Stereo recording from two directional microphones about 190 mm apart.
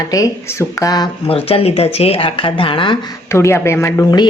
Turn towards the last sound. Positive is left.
turn(degrees=15)  # may be behind; listen again after turning